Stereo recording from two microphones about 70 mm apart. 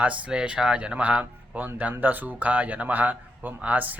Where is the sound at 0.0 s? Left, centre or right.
Centre.